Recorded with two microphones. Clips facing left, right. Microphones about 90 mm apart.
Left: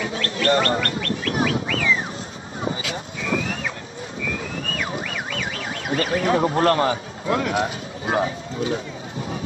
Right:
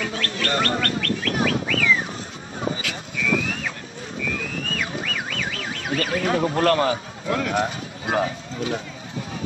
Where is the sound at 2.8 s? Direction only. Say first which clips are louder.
Even; 30° left (ahead or behind).